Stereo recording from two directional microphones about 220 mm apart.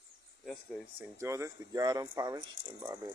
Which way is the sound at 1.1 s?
15° right (ahead or behind).